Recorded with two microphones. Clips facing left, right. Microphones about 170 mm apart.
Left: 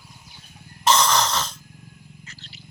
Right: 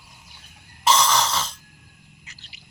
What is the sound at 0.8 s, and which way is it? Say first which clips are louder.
Cough: left 1 dB; 5° right (ahead or behind).